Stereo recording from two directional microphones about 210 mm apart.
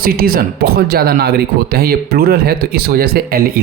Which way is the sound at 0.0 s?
45° right (ahead or behind).